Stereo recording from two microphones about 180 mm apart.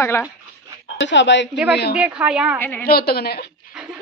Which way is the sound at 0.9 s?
80° left.